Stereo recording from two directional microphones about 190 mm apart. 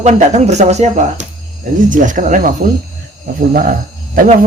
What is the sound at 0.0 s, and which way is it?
Speech, 40° right (ahead or behind).